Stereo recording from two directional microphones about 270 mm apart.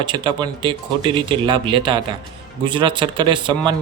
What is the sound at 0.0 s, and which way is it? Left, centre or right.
Speech, centre.